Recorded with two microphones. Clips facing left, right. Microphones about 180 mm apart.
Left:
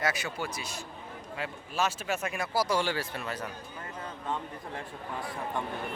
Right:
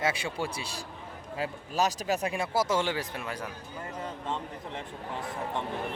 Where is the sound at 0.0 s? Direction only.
30° right (ahead or behind).